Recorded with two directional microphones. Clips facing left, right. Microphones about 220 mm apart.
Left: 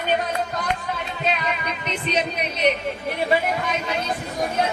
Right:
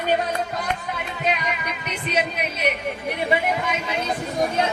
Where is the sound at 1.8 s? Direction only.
10° right (ahead or behind).